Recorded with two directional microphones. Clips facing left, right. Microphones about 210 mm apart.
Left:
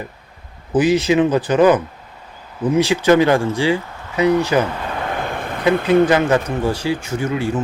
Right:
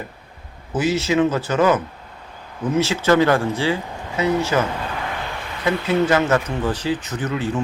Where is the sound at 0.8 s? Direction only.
15° left (ahead or behind).